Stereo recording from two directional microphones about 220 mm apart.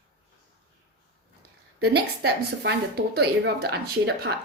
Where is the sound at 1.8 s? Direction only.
50° right (ahead or behind).